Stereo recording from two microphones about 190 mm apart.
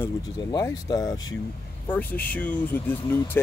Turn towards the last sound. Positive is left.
turn(degrees=10)  # may be behind; listen again after turning